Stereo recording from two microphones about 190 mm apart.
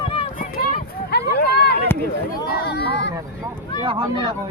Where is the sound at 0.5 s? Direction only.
50° left (ahead or behind).